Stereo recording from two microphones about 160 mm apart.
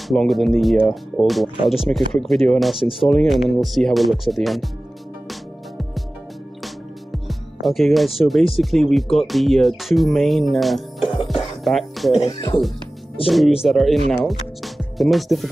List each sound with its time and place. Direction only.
0.1 s speech: centre (ahead or behind)
2.8 s speech: 35° left (ahead or behind)
3.1 s speech: centre (ahead or behind)
5.3 s music: centre (ahead or behind)
8.2 s speech: centre (ahead or behind)
11.2 s music: centre (ahead or behind)
12.2 s speech: 25° left (ahead or behind)
13.2 s speech: centre (ahead or behind)